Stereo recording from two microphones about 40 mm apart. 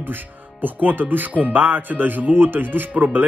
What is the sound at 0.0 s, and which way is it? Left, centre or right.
Speech, right.